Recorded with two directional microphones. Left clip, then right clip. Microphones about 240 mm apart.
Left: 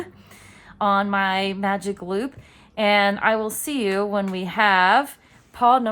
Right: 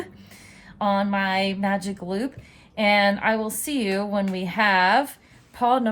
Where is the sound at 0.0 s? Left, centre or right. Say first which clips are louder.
Left 1 dB; centre.